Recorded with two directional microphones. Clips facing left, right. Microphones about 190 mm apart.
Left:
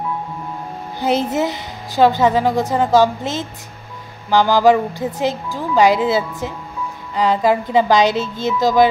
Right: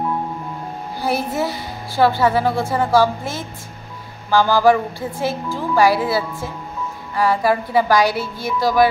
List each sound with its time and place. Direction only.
1.0 s a woman's voice: 20° left (ahead or behind)